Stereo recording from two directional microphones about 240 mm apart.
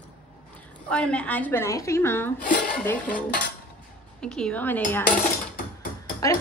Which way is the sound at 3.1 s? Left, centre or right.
Left.